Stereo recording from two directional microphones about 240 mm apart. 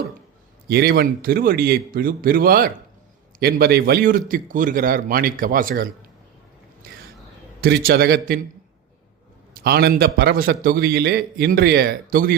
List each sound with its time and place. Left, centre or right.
0.7 s a man's voice: right
6.8 s a sound: right
7.6 s a man's voice: right
9.6 s a man's voice: right